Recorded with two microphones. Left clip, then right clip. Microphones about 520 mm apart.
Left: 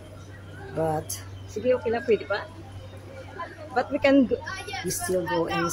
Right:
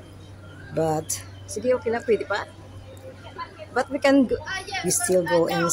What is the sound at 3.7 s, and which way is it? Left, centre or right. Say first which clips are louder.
Speech: right 1 dB; left.